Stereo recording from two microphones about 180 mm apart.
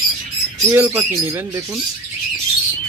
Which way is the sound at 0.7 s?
15° right (ahead or behind).